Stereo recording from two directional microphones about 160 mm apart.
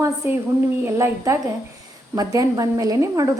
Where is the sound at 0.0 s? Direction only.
20° right (ahead or behind).